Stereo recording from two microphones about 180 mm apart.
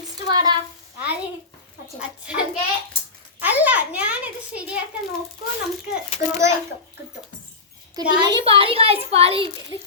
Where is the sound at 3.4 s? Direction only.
10° right (ahead or behind).